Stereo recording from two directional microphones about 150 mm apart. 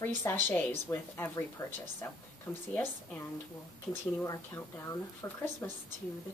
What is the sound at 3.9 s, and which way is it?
A woman's voice, 15° left (ahead or behind).